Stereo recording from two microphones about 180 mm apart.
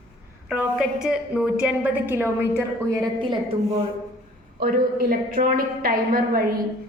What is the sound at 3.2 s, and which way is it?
Speech, 25° right (ahead or behind).